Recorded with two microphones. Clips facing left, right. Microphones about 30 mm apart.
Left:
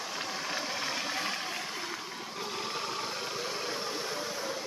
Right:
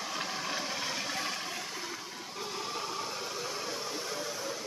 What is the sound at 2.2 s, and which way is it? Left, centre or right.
Vehicle, left.